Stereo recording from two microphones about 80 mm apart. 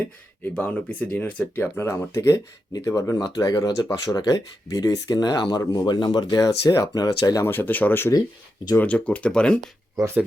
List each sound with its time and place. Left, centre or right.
0.4 s speech: left
1.7 s speech: left
3.2 s speech: left
7.4 s speech: left